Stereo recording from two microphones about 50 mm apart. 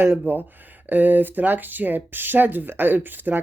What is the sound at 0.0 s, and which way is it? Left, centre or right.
Speech, right.